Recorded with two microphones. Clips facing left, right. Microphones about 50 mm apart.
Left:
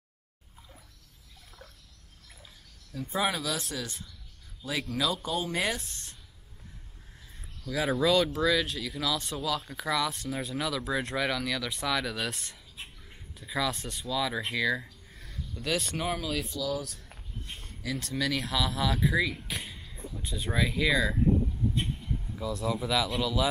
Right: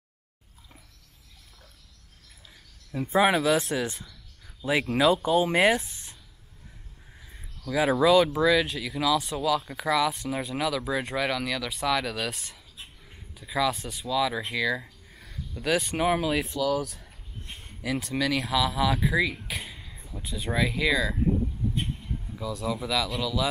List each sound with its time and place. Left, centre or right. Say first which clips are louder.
2.9 s speech: right 8 dB; right
4.9 s speech: right 9 dB; right
7.7 s speech: right 5 dB; centre
16.0 s speech: right 7 dB; centre
17.6 s a sound: right 6 dB; centre
18.0 s speech: right 2 dB; centre
21.8 s a sound: even; centre
22.4 s speech: right 1 dB; centre